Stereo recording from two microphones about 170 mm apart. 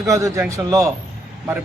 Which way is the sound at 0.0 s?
20° right (ahead or behind).